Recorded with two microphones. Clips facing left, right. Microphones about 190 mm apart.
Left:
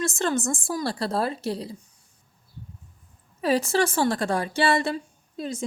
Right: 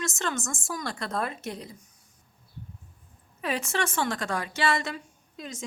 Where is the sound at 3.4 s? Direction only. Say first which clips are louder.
Left 7 dB; 35° left (ahead or behind).